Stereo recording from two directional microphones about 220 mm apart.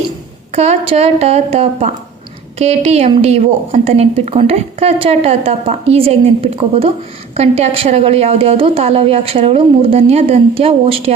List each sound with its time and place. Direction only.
0.5 s a woman's voice: 30° right (ahead or behind)